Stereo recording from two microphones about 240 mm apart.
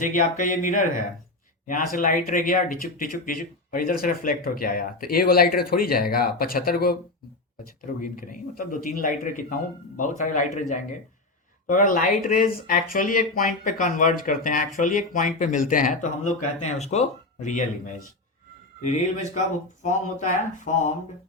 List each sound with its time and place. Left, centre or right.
0.0 s speech: left
8.0 s speech: left